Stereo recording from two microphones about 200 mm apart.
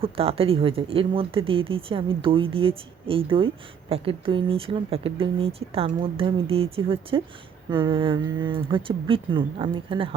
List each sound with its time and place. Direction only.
0.0 s speech: 30° right (ahead or behind)